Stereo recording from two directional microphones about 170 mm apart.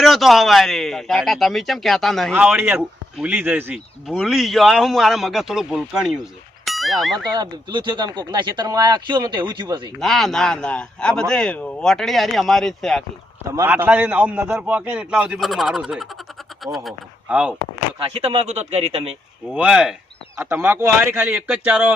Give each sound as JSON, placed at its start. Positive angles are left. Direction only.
{"t": 0.0, "sound": "a man's voice", "side_deg": 0}
{"t": 2.3, "sound": "a man's voice", "side_deg": -10}
{"t": 6.7, "sound": "a sound", "side_deg": 0}
{"t": 7.3, "sound": "speech", "side_deg": -25}
{"t": 10.0, "sound": "a man's voice", "side_deg": 0}
{"t": 13.5, "sound": "a man's voice", "side_deg": -15}
{"t": 18.1, "sound": "speech", "side_deg": -35}
{"t": 19.5, "sound": "a man's voice", "side_deg": -5}
{"t": 20.3, "sound": "a man's voice", "side_deg": -15}